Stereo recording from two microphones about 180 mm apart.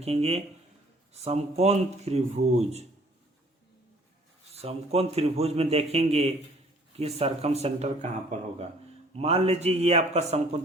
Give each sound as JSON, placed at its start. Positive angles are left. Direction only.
{"t": 0.0, "sound": "a man's voice", "side_deg": -35}
{"t": 4.5, "sound": "a man's voice", "side_deg": -35}
{"t": 9.1, "sound": "a man's voice", "side_deg": -35}